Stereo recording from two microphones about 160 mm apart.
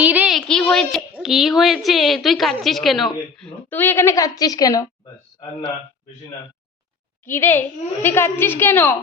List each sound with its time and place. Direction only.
0.0 s a sound: 10° right (ahead or behind)
1.1 s a woman's voice: centre (ahead or behind); by 4.9 s 25° left (ahead or behind)
7.3 s a woman's voice: 10° left (ahead or behind)